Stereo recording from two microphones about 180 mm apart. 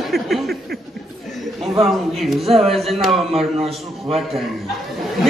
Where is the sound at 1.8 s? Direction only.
Centre (ahead or behind).